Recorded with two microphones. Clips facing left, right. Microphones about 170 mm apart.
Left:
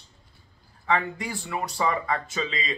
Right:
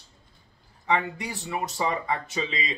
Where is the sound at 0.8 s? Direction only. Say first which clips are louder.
Even; 20° right (ahead or behind).